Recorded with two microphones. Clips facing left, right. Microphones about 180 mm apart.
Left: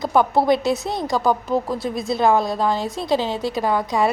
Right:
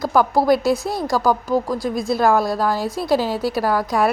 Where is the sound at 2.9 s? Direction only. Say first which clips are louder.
Right 2 dB; 5° right (ahead or behind).